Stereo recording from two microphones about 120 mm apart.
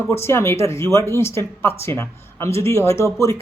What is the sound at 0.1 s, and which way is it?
Speech, 20° left (ahead or behind).